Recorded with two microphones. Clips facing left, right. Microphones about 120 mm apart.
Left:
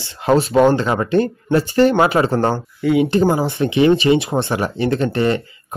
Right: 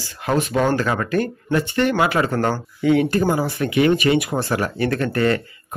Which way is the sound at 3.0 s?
20° left (ahead or behind).